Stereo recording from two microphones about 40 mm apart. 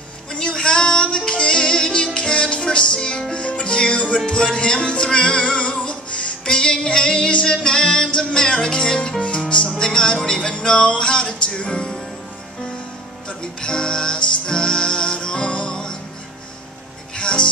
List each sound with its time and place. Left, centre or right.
0.3 s music: centre
13.4 s music: left
17.2 s music: left